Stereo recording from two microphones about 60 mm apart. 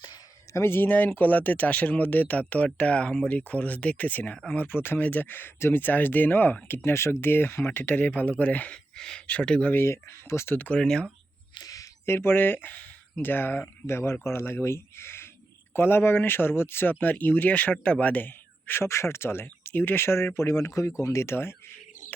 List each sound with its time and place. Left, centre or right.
0.5 s speech: left
6.7 s speech: left
9.0 s speech: centre
9.2 s speech: left
9.7 s speech: left
10.5 s speech: left
10.8 s speech: centre
11.6 s a sound: left
12.0 s speech: left
18.9 s speech: left